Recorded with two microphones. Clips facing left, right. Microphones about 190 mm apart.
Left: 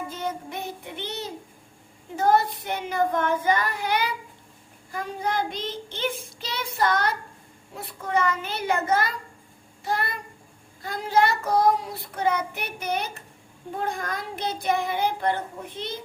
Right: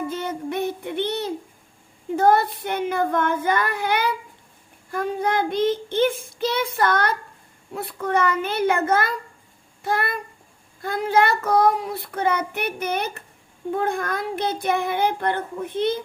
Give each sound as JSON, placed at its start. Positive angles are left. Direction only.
{"t": 0.1, "sound": "child singing", "side_deg": -60}
{"t": 9.8, "sound": "a child's voice", "side_deg": -55}
{"t": 10.8, "sound": "child singing", "side_deg": -55}